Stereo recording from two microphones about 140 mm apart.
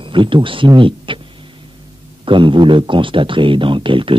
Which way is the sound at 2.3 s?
35° right (ahead or behind).